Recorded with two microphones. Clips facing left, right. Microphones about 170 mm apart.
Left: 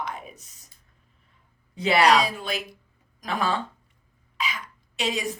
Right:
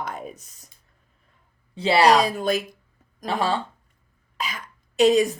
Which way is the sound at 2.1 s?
45° right (ahead or behind).